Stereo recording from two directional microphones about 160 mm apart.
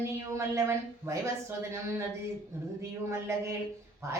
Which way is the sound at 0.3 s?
20° right (ahead or behind).